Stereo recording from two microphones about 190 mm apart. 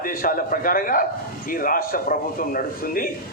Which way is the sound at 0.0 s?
50° left (ahead or behind).